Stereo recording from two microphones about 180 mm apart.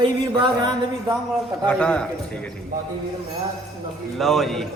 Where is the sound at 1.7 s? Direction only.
5° left (ahead or behind).